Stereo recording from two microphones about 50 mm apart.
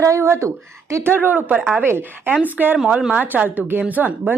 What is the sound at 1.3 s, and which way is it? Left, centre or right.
Speech, right.